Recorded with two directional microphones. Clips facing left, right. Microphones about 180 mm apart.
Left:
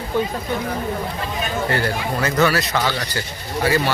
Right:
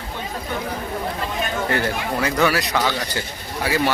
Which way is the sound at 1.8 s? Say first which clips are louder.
Left 1 dB; 15° right (ahead or behind).